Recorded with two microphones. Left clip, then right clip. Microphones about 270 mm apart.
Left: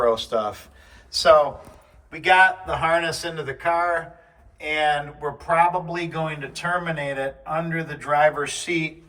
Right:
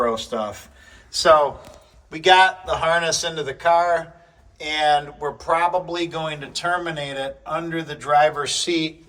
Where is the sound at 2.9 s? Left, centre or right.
Centre.